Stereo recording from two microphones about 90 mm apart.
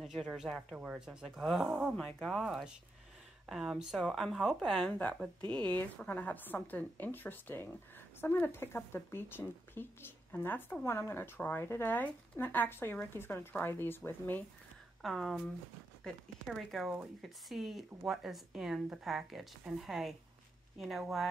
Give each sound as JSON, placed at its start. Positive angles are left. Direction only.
{"t": 0.0, "sound": "speech", "side_deg": 0}
{"t": 1.4, "sound": "speech", "side_deg": 5}
{"t": 1.7, "sound": "speech", "side_deg": -10}
{"t": 2.0, "sound": "speech", "side_deg": 10}
{"t": 15.0, "sound": "speech", "side_deg": 0}